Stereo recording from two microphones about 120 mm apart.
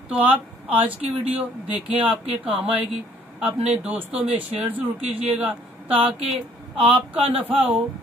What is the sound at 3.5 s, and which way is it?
Speech, 60° right (ahead or behind).